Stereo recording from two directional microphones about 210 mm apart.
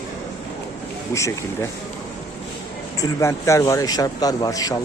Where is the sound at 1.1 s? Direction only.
15° left (ahead or behind).